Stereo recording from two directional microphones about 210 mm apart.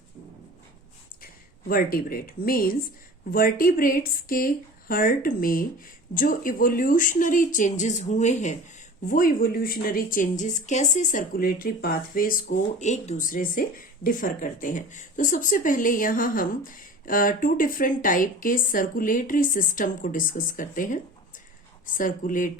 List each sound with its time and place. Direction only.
1.2 s speech: 45° left (ahead or behind)